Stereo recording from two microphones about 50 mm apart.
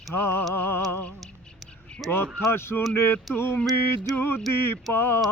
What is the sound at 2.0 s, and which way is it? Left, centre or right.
Speech, centre.